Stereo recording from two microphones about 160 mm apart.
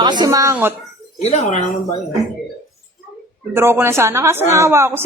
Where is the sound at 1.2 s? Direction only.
45° left (ahead or behind).